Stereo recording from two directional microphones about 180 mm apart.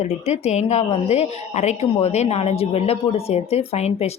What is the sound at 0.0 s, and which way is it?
A woman's voice, 40° left (ahead or behind).